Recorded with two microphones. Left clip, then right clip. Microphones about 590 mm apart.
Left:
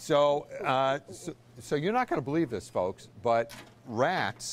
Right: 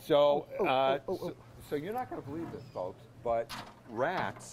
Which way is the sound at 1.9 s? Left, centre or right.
Left.